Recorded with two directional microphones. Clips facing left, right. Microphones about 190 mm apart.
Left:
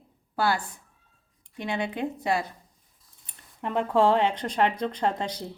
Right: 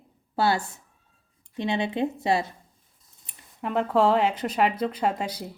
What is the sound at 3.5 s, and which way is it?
Speech, centre (ahead or behind).